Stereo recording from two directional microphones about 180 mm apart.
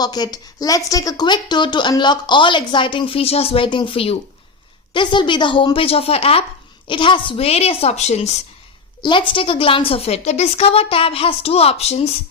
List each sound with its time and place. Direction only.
0.0 s a woman's voice: 20° left (ahead or behind); by 8.4 s 40° left (ahead or behind)
9.0 s a woman's voice: 25° left (ahead or behind)